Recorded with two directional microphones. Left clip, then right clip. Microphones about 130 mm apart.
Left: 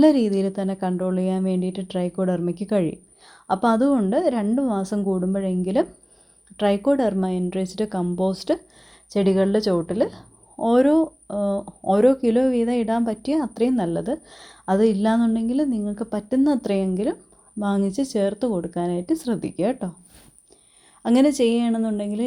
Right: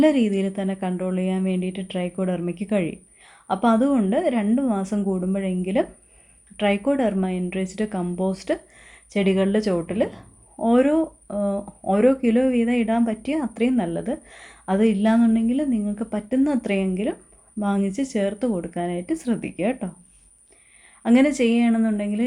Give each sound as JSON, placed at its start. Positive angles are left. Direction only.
{"t": 0.0, "sound": "a woman's voice", "side_deg": 40}
{"t": 21.0, "sound": "speech", "side_deg": 45}